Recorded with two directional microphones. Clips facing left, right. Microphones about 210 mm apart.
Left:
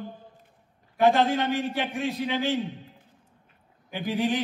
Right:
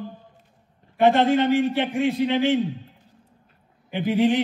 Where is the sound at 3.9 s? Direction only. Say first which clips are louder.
Right 6 dB; 20° right (ahead or behind).